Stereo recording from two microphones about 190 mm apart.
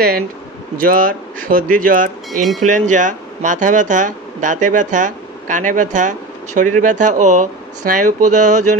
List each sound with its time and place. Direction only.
0.7 s speech: 45° right (ahead or behind)